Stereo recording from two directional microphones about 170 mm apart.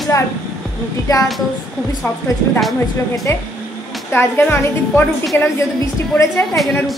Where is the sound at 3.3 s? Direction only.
15° left (ahead or behind).